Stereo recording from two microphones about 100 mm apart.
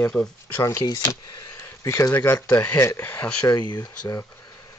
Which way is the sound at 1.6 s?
35° left (ahead or behind).